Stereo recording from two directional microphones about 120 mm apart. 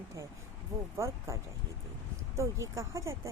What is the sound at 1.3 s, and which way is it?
A woman's voice, 25° right (ahead or behind).